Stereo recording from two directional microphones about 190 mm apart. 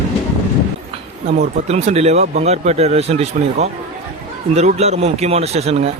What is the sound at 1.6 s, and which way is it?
A man's voice, 35° right (ahead or behind).